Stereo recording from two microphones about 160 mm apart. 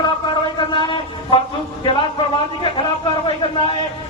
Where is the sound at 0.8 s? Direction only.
30° left (ahead or behind).